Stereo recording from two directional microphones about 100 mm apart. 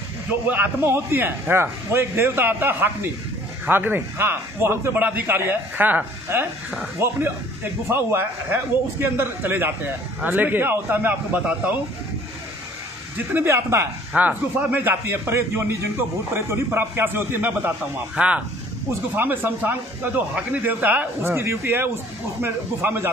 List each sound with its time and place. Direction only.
0.5 s a man's voice: 20° right (ahead or behind)
13.3 s a man's voice: 25° right (ahead or behind)
14.1 s a man's voice: 15° right (ahead or behind)